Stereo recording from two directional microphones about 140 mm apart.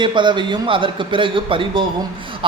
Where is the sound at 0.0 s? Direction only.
35° right (ahead or behind).